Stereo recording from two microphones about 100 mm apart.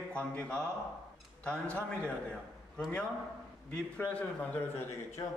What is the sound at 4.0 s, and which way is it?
Speech, 15° left (ahead or behind).